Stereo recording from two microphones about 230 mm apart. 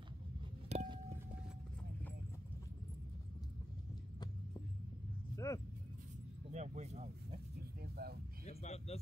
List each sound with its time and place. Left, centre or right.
0.7 s vehicle: right
5.3 s vehicle: centre
6.5 s speech: right
7.8 s a sound: right
8.5 s speech: left